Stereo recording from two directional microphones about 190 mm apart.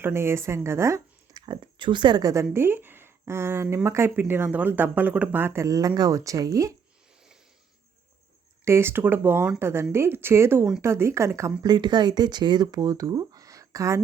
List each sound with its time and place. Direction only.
0.0 s speech: 15° right (ahead or behind)
8.6 s speech: 15° right (ahead or behind)